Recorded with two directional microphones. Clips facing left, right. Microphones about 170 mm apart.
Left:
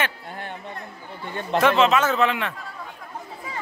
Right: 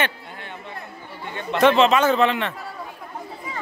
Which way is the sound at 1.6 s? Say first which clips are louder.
Right 3 dB; centre (ahead or behind).